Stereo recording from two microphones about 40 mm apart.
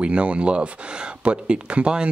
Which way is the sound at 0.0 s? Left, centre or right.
Right.